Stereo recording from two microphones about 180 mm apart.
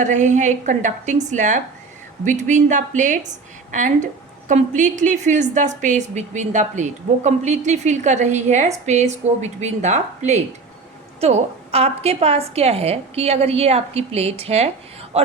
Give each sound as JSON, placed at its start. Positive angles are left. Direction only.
{"t": 0.0, "sound": "a woman's voice", "side_deg": -45}